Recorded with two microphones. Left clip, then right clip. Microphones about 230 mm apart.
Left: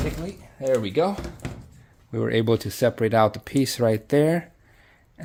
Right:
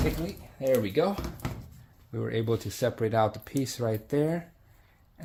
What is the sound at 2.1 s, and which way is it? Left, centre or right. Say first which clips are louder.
Speech: left 8 dB; left.